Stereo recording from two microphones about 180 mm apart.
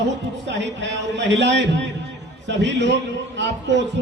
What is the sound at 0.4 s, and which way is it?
A man's voice, 75° right (ahead or behind).